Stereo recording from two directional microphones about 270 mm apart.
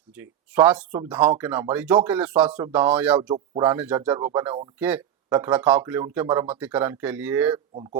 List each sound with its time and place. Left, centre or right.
0.2 s speech: centre
3.3 s speech: right
3.7 s speech: centre
7.5 s speech: centre